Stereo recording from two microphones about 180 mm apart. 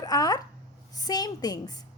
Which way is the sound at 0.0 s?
20° left (ahead or behind).